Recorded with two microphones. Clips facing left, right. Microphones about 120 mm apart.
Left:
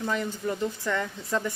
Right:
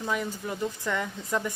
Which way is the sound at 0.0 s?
10° right (ahead or behind).